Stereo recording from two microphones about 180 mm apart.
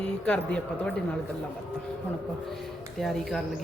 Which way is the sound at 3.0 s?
Centre (ahead or behind).